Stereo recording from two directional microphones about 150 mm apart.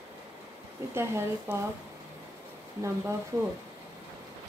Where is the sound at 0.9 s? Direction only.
15° right (ahead or behind).